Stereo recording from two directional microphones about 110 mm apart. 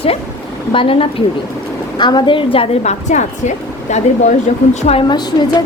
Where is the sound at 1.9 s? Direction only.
45° left (ahead or behind).